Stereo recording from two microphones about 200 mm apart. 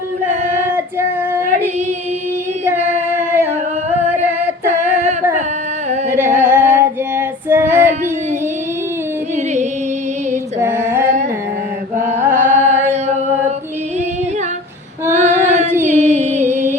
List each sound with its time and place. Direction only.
0.6 s female singing: 10° right (ahead or behind)
4.2 s female singing: 35° right (ahead or behind)
6.1 s singing: 10° right (ahead or behind)
6.4 s female singing: 10° right (ahead or behind)
10.6 s female singing: 10° right (ahead or behind)
12.2 s chant: 10° right (ahead or behind)
15.1 s female singing: 35° right (ahead or behind)
15.9 s music: 35° right (ahead or behind)